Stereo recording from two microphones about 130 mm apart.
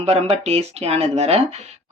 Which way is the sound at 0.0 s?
55° right (ahead or behind).